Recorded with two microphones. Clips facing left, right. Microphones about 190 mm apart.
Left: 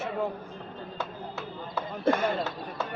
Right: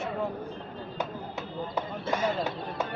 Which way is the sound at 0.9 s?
15° right (ahead or behind).